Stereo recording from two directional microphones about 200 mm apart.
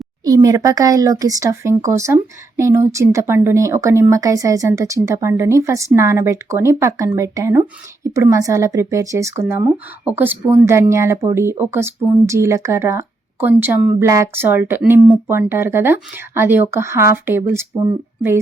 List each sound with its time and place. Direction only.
0.3 s speech: 15° right (ahead or behind)